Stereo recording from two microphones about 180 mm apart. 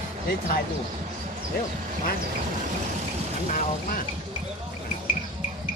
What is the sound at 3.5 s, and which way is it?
Speech, 50° left (ahead or behind).